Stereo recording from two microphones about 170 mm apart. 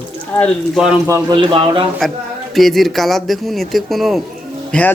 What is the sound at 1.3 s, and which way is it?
Speech, 30° right (ahead or behind).